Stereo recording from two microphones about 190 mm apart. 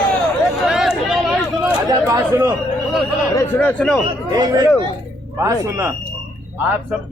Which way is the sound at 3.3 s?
10° left (ahead or behind).